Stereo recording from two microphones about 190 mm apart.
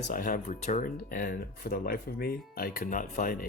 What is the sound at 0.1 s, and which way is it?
Speech, 50° left (ahead or behind).